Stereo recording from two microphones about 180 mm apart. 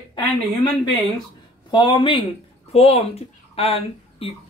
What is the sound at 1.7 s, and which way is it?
Speech, 25° left (ahead or behind).